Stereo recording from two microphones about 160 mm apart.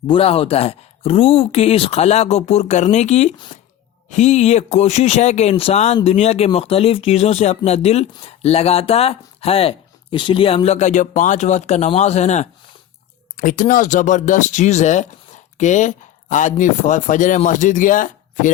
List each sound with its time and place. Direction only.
0.1 s speech: 35° left (ahead or behind)
13.3 s speech: 55° left (ahead or behind)